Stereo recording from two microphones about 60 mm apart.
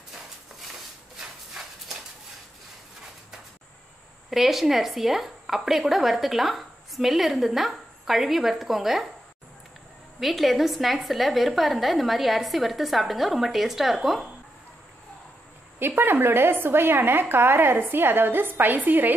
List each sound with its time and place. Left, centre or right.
4.3 s a woman's voice: centre
10.2 s a woman's voice: centre
15.8 s a woman's voice: right